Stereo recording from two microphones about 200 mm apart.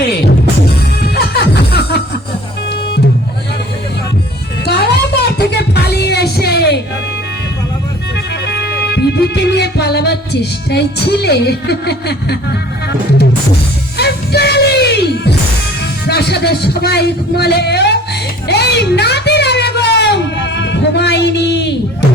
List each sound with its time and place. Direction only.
1.0 s music: 50° left (ahead or behind)
4.6 s music: 55° left (ahead or behind)
8.4 s music: 55° left (ahead or behind)
13.9 s music: 55° left (ahead or behind)